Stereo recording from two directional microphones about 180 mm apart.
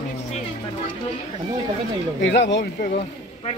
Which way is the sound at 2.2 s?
80° left.